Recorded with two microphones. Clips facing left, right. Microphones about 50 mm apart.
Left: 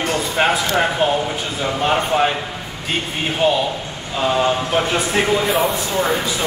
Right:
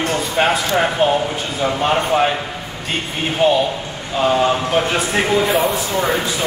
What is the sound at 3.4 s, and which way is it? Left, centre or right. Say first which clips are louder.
Speech: right 3 dB; centre.